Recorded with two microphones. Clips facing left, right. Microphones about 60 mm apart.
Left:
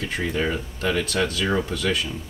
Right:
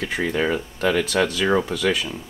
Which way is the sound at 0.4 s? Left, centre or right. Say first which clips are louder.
Right 4 dB; centre.